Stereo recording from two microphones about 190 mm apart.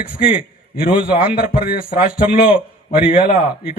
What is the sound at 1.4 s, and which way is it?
A man's voice, 50° left (ahead or behind).